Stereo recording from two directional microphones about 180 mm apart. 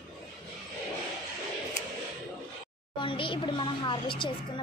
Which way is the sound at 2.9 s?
30° left (ahead or behind).